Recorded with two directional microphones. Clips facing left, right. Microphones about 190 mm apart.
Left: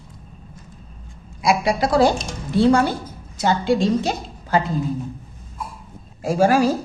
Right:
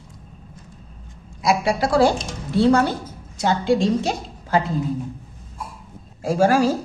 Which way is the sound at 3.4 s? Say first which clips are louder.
Even; centre (ahead or behind).